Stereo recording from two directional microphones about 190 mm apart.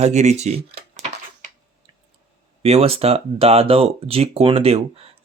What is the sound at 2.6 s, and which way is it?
Speech, 30° right (ahead or behind).